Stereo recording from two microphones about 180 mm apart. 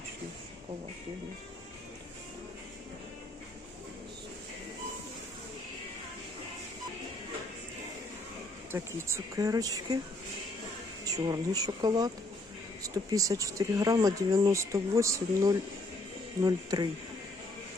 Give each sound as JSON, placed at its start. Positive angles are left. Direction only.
{"t": 8.7, "sound": "speech", "side_deg": -15}
{"t": 11.0, "sound": "speech", "side_deg": -20}